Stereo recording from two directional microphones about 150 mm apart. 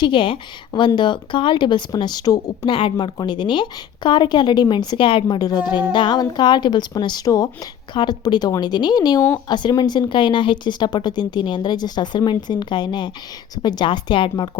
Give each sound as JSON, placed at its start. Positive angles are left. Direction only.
{"t": 0.0, "sound": "a woman's voice", "side_deg": 35}